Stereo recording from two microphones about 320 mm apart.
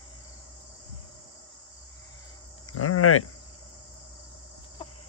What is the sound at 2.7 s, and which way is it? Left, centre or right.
Cricket, left.